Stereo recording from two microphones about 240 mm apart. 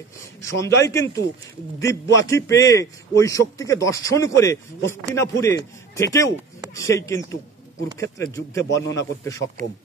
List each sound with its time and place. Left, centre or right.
0.4 s a man's voice: centre